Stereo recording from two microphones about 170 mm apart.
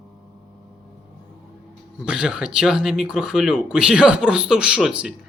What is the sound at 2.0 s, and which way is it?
A man's voice, 5° right (ahead or behind).